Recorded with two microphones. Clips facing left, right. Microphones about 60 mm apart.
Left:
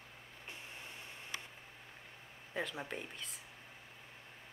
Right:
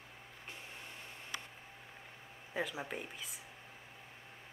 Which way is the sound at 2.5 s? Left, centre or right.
Centre.